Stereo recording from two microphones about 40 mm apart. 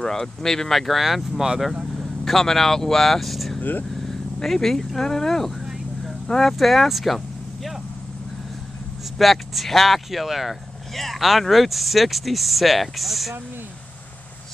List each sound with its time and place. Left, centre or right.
0.0 s speech: centre
9.2 s speech: centre